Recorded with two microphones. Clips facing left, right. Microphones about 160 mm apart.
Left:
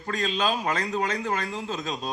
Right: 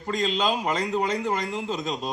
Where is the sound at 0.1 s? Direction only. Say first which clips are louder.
Right 2 dB; 15° right (ahead or behind).